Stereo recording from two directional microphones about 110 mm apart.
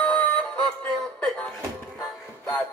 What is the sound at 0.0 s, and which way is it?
Music, 15° left (ahead or behind).